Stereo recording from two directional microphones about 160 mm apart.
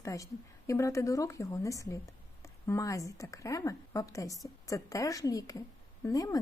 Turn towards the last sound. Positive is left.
turn(degrees=20)  # may be behind; listen again after turning